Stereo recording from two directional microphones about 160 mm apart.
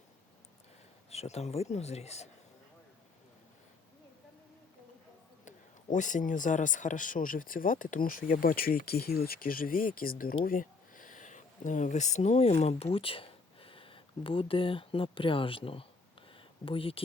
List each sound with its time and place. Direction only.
1.1 s speech: 40° left (ahead or behind)
5.5 s a man's voice: 50° left (ahead or behind); by 15.9 s 35° left (ahead or behind)
16.3 s a sound: 35° left (ahead or behind)